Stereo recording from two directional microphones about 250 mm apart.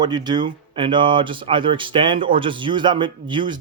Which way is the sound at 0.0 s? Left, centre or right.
Centre.